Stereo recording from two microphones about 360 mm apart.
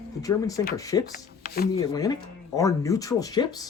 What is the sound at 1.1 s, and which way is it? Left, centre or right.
Speech, left.